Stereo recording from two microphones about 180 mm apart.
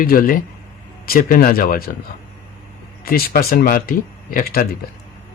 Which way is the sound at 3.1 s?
55° left (ahead or behind).